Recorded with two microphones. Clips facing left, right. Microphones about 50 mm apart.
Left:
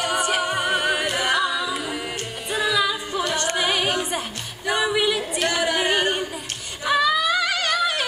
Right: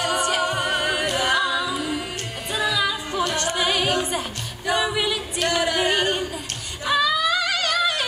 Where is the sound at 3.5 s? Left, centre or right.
Centre.